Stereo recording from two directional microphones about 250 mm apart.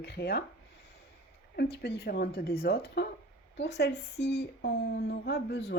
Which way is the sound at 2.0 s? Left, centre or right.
Left.